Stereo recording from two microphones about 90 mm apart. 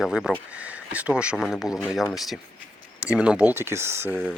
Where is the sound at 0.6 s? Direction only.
15° right (ahead or behind).